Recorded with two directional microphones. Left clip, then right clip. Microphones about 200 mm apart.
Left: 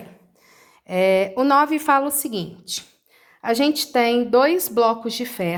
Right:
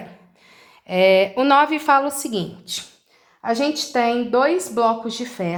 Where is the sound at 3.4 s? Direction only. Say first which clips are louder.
Left 1 dB; 45° left (ahead or behind).